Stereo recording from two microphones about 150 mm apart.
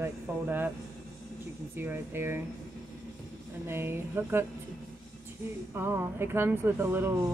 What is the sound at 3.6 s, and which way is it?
Speech, 15° right (ahead or behind).